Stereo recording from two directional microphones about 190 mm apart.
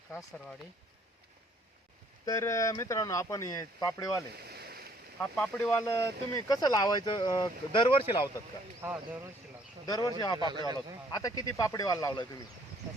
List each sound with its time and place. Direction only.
2.2 s speech: 15° left (ahead or behind)
4.4 s a sound: 55° right (ahead or behind)
5.2 s speech: 10° left (ahead or behind); by 8.3 s 25° left (ahead or behind)
8.8 s speech: 10° right (ahead or behind)
10.1 s speech: 20° left (ahead or behind)
10.3 s a man's voice: 20° right (ahead or behind)
11.1 s speech: 20° left (ahead or behind)